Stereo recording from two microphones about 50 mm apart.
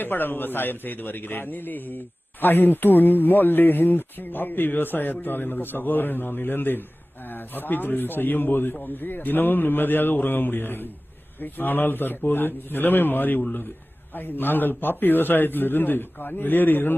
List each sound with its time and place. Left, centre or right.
0.0 s a man's voice: left